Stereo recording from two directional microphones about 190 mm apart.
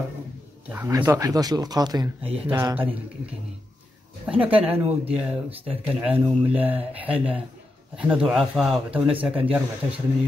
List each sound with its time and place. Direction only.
0.7 s speech: 10° right (ahead or behind)
2.3 s speech: 10° right (ahead or behind)
4.3 s a man's voice: 10° right (ahead or behind)